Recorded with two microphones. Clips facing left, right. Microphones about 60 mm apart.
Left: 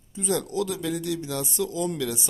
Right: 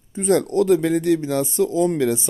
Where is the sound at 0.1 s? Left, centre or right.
Right.